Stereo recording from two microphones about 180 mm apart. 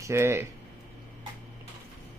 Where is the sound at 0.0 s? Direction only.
15° right (ahead or behind).